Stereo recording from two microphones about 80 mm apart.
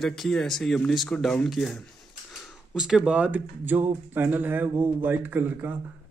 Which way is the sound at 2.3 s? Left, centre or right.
Centre.